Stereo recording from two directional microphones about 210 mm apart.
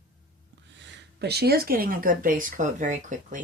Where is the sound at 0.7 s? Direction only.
50° right (ahead or behind).